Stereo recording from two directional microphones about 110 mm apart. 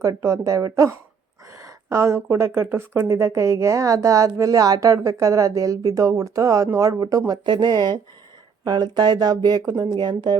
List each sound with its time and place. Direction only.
0.0 s a woman's voice: 30° right (ahead or behind)
1.6 s a sound: 25° right (ahead or behind)
2.3 s a woman's voice: 20° right (ahead or behind)
7.4 s speech: 45° right (ahead or behind)